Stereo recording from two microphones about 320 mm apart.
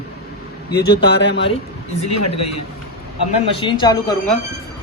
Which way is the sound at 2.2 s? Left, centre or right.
Left.